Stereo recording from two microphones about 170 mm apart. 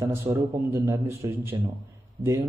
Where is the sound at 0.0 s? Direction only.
15° right (ahead or behind).